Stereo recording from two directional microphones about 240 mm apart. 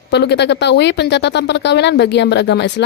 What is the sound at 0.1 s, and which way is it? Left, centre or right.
Speech, left.